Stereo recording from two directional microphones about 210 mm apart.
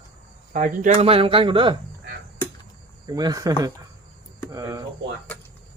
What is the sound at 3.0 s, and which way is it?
Speech, 20° right (ahead or behind).